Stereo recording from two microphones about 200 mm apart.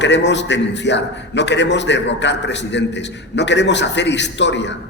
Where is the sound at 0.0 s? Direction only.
60° left (ahead or behind).